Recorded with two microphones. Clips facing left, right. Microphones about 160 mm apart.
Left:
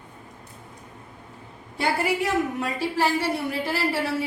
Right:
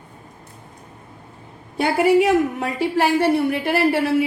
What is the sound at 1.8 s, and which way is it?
A woman's voice, 65° right (ahead or behind).